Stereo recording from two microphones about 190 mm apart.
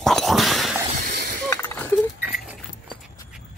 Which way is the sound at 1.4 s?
10° left (ahead or behind).